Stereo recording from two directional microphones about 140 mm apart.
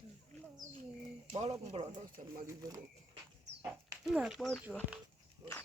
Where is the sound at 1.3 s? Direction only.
50° right (ahead or behind).